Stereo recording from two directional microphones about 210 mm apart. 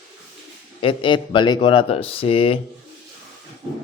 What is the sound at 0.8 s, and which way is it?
Speech, 25° left (ahead or behind).